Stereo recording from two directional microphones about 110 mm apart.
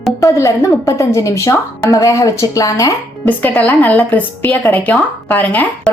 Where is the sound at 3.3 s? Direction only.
15° left (ahead or behind).